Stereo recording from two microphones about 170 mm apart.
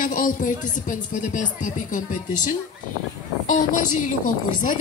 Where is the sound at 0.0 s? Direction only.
50° left (ahead or behind).